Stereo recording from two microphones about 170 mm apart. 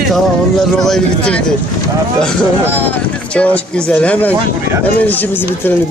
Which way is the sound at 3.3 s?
5° left (ahead or behind).